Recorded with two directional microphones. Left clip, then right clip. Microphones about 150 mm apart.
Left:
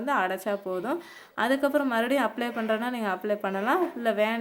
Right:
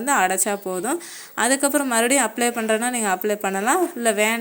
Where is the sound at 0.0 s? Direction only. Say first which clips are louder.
Right 7 dB; 25° right (ahead or behind).